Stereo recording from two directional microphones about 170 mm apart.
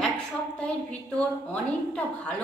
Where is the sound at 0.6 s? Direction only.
10° left (ahead or behind).